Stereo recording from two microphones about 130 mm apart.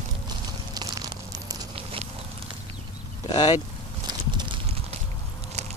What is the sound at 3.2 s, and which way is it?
Speech, 35° left (ahead or behind).